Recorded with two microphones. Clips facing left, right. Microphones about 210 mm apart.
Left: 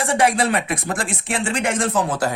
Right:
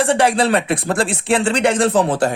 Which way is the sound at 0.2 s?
30° right (ahead or behind).